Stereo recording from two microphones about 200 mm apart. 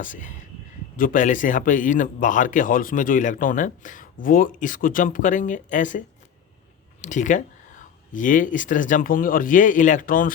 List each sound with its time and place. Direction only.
0.0 s a man's voice: 40° left (ahead or behind)